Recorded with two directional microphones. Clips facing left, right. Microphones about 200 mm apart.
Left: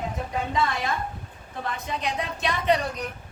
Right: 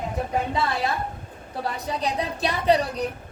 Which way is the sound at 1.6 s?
35° right (ahead or behind).